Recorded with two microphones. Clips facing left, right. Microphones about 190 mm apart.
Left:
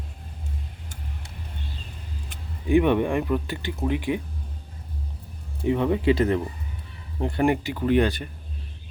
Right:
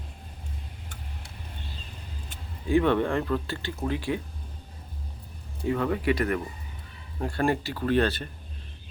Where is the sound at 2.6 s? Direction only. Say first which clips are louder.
Left 3 dB; 15° left (ahead or behind).